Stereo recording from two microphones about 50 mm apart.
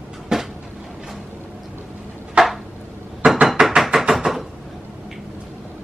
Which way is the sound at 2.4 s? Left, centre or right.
Centre.